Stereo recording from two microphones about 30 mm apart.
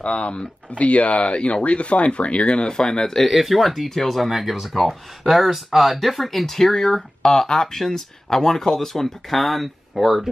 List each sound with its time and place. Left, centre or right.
0.0 s speech: left
2.6 s speech: left
3.3 s speech: centre
4.3 s speech: centre
6.4 s speech: centre